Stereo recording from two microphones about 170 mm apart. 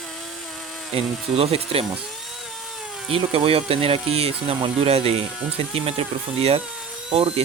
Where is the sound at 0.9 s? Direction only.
35° right (ahead or behind).